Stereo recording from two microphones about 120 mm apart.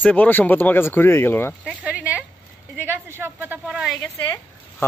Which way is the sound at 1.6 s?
10° right (ahead or behind).